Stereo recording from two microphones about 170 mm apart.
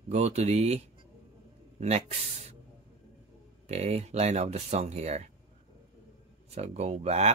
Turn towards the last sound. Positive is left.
turn(degrees=-40)  # may be behind; listen again after turning